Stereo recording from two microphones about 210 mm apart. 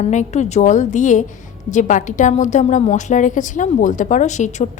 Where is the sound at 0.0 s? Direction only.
35° left (ahead or behind).